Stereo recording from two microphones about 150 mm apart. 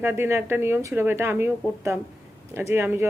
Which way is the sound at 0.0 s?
15° right (ahead or behind).